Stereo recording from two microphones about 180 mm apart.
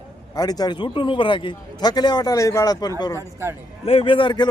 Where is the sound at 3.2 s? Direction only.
15° right (ahead or behind).